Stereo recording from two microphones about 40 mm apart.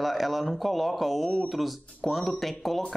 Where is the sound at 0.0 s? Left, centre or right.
Centre.